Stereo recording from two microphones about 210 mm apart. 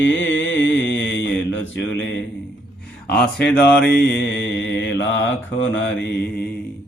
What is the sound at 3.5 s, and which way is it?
Mantra, 5° left (ahead or behind).